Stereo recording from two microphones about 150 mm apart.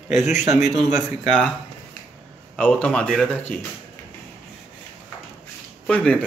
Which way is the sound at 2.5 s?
5° left (ahead or behind).